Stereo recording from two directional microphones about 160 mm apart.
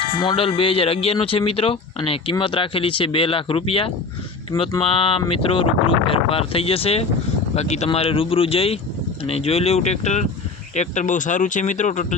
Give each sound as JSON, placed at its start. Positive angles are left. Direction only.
{"t": 0.2, "sound": "speech", "side_deg": 30}